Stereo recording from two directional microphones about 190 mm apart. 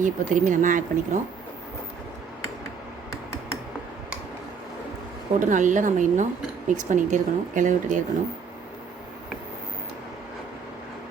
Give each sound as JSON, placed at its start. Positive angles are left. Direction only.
{"t": 0.0, "sound": "speech", "side_deg": -45}
{"t": 5.4, "sound": "speech", "side_deg": -40}